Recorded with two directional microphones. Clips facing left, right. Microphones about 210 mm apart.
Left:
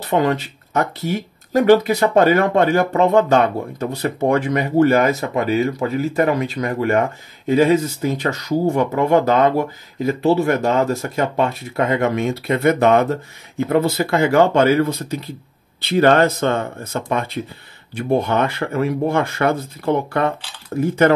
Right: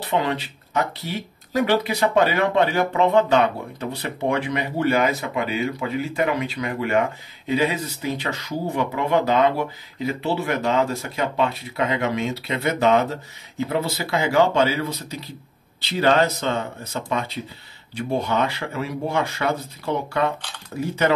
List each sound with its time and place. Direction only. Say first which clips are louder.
0.0 s speech: left 5 dB; 45° left (ahead or behind)